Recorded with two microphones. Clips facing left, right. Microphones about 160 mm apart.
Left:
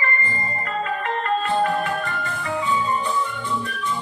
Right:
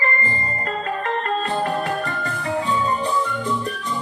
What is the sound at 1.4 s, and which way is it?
Music, 35° right (ahead or behind).